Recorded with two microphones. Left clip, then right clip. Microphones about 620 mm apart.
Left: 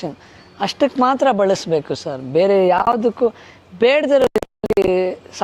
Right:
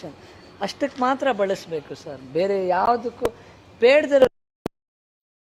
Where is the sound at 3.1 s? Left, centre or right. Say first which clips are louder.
Left 11 dB; left.